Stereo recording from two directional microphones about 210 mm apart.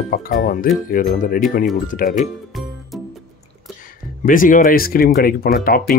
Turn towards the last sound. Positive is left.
turn(degrees=45)  # may be behind; listen again after turning